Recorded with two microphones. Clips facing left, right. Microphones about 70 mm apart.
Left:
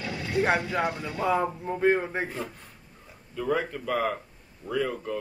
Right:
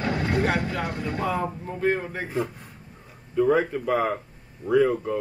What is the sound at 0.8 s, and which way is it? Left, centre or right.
Speech, right.